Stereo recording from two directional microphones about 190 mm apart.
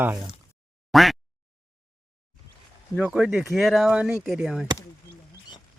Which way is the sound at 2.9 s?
5° right (ahead or behind).